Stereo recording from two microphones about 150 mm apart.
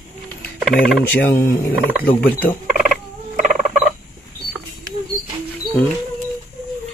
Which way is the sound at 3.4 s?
65° right (ahead or behind).